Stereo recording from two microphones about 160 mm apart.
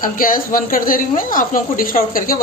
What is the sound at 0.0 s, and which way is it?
Speech, 60° left (ahead or behind).